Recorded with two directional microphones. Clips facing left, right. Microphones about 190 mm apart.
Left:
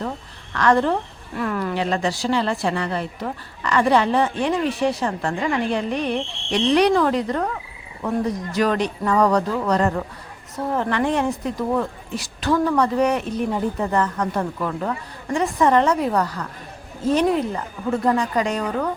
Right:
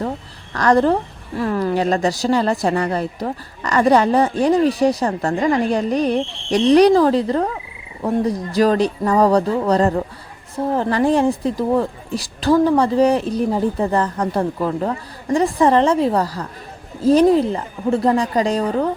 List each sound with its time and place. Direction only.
0.5 s speech: 40° right (ahead or behind)